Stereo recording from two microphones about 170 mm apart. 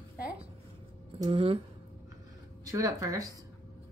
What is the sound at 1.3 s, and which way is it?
Speech, 35° right (ahead or behind).